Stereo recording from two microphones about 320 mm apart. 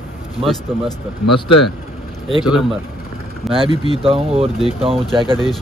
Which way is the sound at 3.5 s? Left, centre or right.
Centre.